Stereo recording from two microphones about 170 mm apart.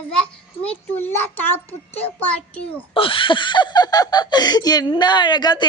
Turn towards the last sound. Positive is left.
turn(degrees=25)  # may be behind; listen again after turning